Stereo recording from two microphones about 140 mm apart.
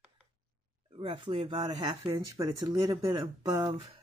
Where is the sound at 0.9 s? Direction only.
40° right (ahead or behind).